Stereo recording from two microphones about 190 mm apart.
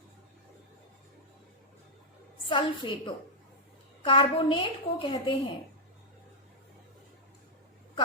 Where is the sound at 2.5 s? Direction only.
25° left (ahead or behind).